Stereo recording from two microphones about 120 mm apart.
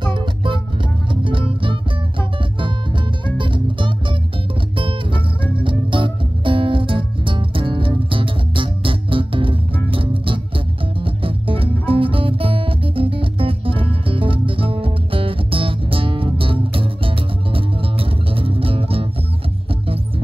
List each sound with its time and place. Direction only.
0.0 s music: 45° right (ahead or behind)